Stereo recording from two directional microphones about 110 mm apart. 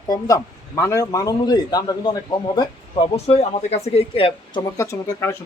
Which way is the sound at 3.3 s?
65° left (ahead or behind).